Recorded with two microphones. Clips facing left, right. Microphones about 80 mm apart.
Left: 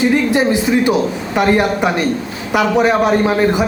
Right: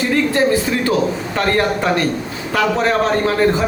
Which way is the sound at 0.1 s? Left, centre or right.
Centre.